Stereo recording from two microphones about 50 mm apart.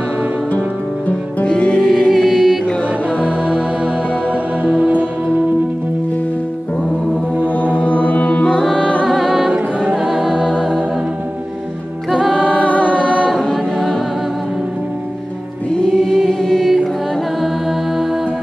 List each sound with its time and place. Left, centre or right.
1.0 s music: left
1.8 s music: centre
7.8 s music: left
8.5 s music: centre
9.0 s music: centre
9.5 s music: centre
9.9 s music: centre
12.1 s music: centre
12.4 s music: centre
12.6 s music: left
13.3 s a capella: centre
15.9 s chant: centre
17.4 s music: centre